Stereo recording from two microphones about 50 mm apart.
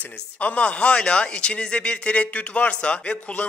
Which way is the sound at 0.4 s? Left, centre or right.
Left.